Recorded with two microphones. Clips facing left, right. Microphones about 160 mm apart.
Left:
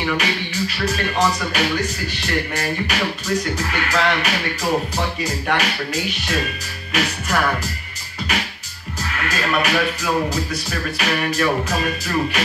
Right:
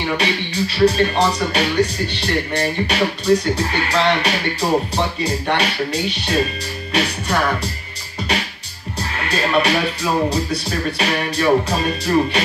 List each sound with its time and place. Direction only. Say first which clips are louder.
0.2 s speech: right 3 dB; 30° right (ahead or behind)
9.1 s speech: right 4 dB; 30° right (ahead or behind)